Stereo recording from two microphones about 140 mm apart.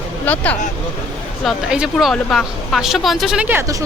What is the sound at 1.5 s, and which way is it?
A woman's voice, 5° right (ahead or behind).